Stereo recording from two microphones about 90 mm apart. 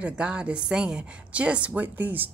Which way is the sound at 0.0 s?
10° right (ahead or behind).